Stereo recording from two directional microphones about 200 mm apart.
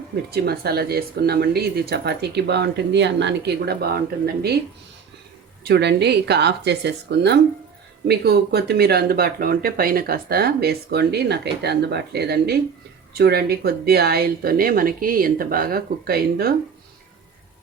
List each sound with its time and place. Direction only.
0.3 s speech: 50° right (ahead or behind)
5.6 s speech: 55° right (ahead or behind)